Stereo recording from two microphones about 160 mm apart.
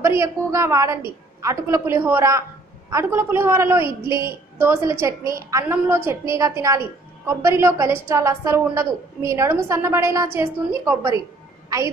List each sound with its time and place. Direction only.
0.0 s a woman's voice: 15° right (ahead or behind)